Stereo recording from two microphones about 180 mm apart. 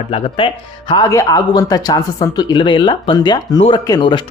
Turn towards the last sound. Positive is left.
turn(degrees=25)  # may be behind; listen again after turning